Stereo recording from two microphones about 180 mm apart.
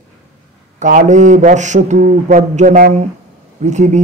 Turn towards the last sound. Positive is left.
turn(degrees=-40)  # may be behind; listen again after turning